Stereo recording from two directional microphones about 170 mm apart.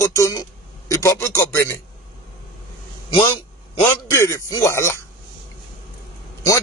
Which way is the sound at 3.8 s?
15° left (ahead or behind).